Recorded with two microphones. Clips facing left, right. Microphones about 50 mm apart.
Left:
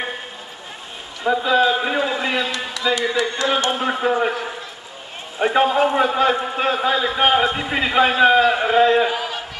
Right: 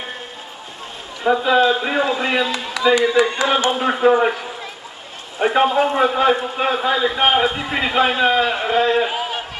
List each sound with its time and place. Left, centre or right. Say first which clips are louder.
1.2 s a man's voice: right 2 dB; centre
1.6 s speech: right 1 dB; centre
2.0 s a man's voice: right 2 dB; centre
5.4 s a man's voice: right 1 dB; centre
9.1 s a sound: right 1 dB; right